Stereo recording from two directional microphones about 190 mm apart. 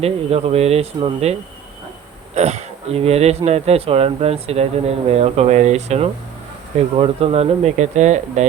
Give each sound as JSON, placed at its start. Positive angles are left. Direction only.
{"t": 0.0, "sound": "speech", "side_deg": -30}